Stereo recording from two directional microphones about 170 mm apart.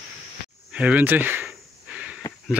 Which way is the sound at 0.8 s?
10° right (ahead or behind).